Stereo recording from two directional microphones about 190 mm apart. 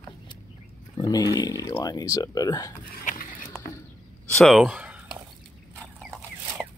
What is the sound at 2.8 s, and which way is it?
Dog, 50° left (ahead or behind).